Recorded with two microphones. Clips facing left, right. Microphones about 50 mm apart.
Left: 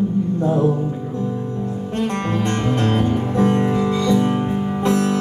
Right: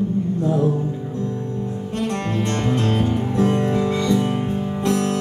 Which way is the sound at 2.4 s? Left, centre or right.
Left.